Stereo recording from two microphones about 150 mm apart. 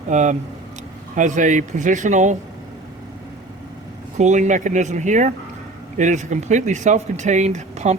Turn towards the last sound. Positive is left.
turn(degrees=-50)  # may be behind; listen again after turning